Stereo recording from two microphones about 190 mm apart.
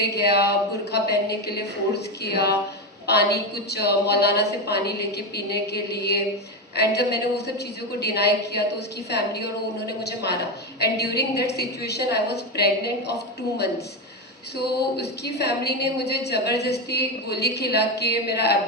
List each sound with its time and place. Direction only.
0.0 s a woman's voice: 60° left (ahead or behind)
14.8 s a woman's voice: 60° left (ahead or behind)